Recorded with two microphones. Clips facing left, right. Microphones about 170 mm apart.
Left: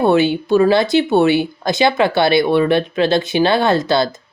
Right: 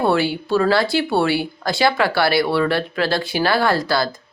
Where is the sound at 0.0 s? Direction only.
20° left (ahead or behind).